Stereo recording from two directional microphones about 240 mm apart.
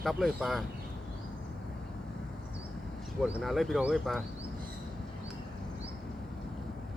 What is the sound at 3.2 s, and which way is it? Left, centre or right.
Speech, centre.